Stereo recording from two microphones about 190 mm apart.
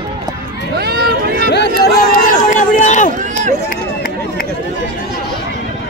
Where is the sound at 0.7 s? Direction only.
55° right (ahead or behind).